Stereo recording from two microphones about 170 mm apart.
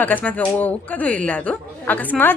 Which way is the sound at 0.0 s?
10° left (ahead or behind).